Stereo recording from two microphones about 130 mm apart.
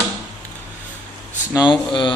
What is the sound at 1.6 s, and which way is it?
Speech, 35° left (ahead or behind).